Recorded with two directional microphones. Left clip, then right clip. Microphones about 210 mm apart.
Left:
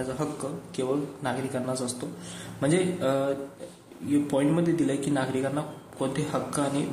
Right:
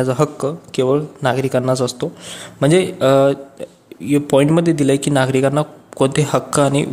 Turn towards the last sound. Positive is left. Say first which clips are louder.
# right 13 dB
turn(degrees=-50)  # may be behind; listen again after turning